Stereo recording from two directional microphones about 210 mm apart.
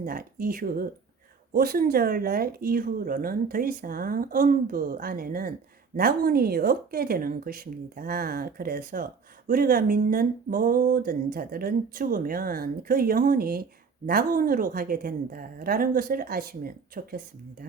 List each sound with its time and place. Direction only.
0.0 s speech: 40° right (ahead or behind)